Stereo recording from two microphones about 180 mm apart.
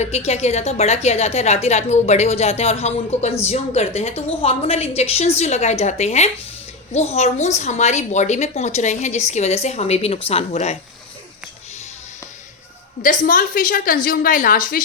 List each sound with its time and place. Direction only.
0.0 s a woman's voice: 35° left (ahead or behind)
13.0 s a woman's voice: 45° left (ahead or behind)